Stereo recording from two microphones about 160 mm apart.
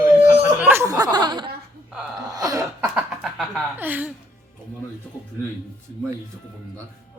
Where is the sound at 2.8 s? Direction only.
5° right (ahead or behind).